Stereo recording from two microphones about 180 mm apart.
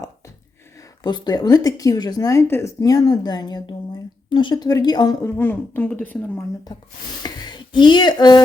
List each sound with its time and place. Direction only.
1.0 s a woman's voice: 25° left (ahead or behind)
7.2 s speech: 20° left (ahead or behind)